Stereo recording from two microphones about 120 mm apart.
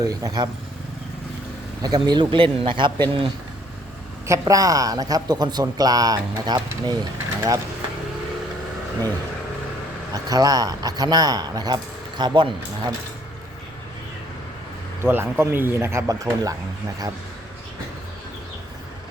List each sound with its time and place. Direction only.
0.0 s a man's voice: 30° right (ahead or behind)
1.8 s speech: 35° right (ahead or behind)
4.3 s a man's voice: 30° right (ahead or behind)
10.1 s a man's voice: 30° right (ahead or behind)
15.0 s speech: 20° right (ahead or behind)